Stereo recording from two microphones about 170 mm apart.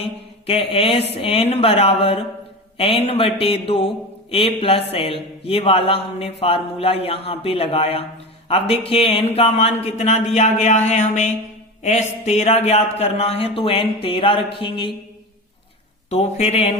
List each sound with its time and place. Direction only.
0.0 s a man's voice: 35° left (ahead or behind)
16.0 s a man's voice: 35° left (ahead or behind)